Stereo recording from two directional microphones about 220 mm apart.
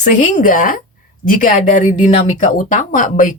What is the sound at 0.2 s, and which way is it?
Speech, 35° left (ahead or behind).